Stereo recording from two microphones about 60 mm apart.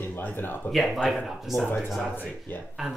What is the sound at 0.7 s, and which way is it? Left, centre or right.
Speech, centre.